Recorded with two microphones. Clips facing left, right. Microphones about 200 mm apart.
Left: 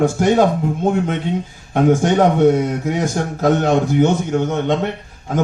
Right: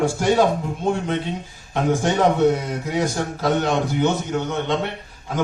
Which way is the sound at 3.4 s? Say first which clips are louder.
Left 5 dB; 50° left (ahead or behind).